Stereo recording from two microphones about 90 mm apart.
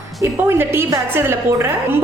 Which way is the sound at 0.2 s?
30° right (ahead or behind).